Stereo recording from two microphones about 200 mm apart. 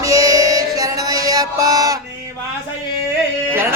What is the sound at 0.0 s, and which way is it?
Music, 15° right (ahead or behind).